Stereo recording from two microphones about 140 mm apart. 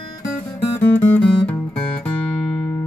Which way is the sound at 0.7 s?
15° left (ahead or behind).